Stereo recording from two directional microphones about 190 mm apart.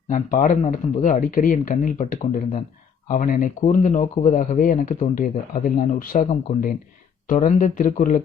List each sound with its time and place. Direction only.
0.1 s speech: 40° left (ahead or behind)